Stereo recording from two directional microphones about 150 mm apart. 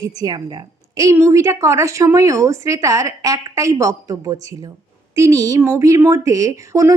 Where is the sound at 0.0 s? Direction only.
25° right (ahead or behind).